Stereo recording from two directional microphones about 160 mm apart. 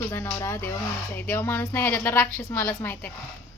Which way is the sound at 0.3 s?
20° left (ahead or behind).